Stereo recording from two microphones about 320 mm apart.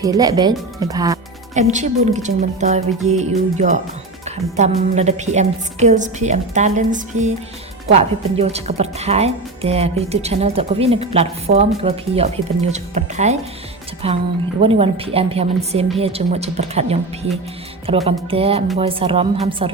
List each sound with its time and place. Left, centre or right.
0.0 s a woman's voice: centre
1.5 s a woman's voice: right